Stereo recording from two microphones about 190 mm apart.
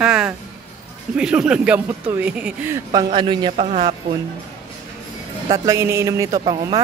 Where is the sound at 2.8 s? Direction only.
25° right (ahead or behind).